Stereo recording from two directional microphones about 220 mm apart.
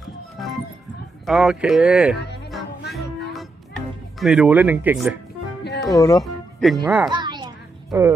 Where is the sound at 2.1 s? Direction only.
50° left (ahead or behind).